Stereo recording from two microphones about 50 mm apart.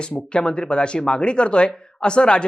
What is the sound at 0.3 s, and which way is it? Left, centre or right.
Speech, centre.